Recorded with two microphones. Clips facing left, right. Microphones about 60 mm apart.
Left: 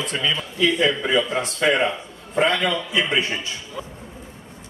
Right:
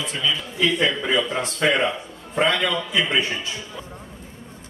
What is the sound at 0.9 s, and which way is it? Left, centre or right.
Speech, centre.